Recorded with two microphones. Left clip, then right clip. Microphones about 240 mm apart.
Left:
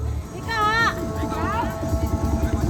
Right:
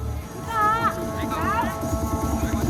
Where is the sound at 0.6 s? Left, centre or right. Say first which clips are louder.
Left 1 dB; left.